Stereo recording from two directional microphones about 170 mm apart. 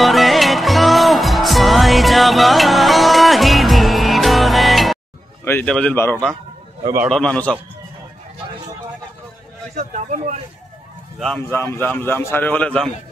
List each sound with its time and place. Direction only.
0.0 s music: centre (ahead or behind)
5.4 s a man's voice: 10° left (ahead or behind)
9.8 s speech: 45° right (ahead or behind)
11.1 s speech: 5° left (ahead or behind)
11.5 s a man's voice: 15° left (ahead or behind)